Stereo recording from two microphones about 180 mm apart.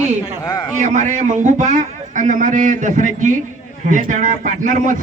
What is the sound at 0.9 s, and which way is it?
Speech, 40° right (ahead or behind).